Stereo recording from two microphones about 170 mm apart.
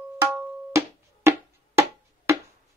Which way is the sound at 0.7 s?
15° right (ahead or behind).